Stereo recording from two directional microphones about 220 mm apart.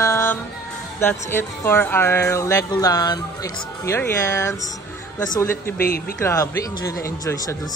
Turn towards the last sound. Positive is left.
turn(degrees=15)  # may be behind; listen again after turning